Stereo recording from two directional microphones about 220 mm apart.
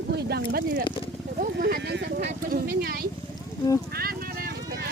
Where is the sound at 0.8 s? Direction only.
20° left (ahead or behind).